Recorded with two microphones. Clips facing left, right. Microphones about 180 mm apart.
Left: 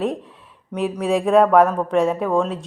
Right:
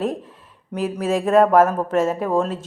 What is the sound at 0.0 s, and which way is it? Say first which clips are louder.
Speech: left 1 dB; centre (ahead or behind).